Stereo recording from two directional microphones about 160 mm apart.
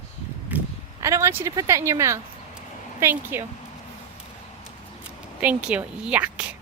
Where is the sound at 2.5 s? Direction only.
10° right (ahead or behind).